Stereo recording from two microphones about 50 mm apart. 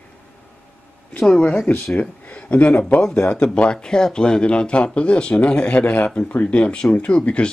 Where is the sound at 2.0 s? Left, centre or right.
Left.